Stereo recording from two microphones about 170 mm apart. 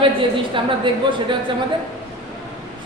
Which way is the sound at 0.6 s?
30° right (ahead or behind).